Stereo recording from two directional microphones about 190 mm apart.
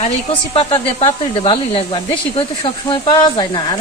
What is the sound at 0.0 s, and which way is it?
A woman's voice, 30° left (ahead or behind).